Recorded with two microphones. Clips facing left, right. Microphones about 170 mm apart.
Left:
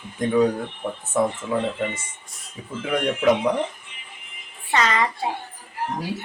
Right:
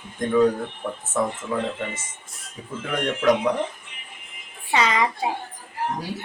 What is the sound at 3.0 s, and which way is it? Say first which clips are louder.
Speech: even; 5° left (ahead or behind).